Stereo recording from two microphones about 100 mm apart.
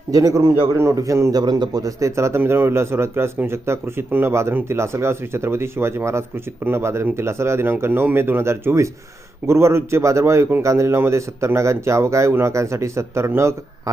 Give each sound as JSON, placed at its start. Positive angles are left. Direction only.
{"t": 0.1, "sound": "a man's voice", "side_deg": -35}
{"t": 1.4, "sound": "speech", "side_deg": -45}